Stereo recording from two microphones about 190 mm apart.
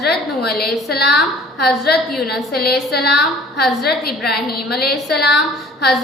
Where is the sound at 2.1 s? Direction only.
Centre (ahead or behind).